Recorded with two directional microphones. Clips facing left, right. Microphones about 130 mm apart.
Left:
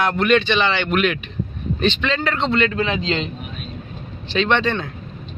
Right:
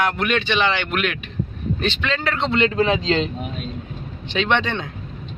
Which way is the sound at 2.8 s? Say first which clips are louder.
Right 3 dB; 35° right (ahead or behind).